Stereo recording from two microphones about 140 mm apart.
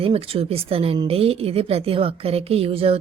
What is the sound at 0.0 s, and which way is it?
Speech, 40° right (ahead or behind).